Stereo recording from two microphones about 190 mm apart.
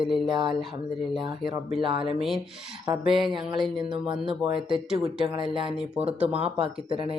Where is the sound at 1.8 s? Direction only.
25° right (ahead or behind).